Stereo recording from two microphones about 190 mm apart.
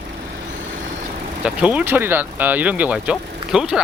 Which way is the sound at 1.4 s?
5° right (ahead or behind).